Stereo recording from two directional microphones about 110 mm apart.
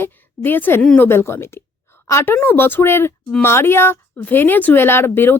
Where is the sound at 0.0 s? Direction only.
20° left (ahead or behind).